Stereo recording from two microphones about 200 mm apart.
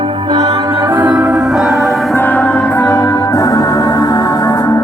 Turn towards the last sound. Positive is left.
turn(degrees=15)  # may be behind; listen again after turning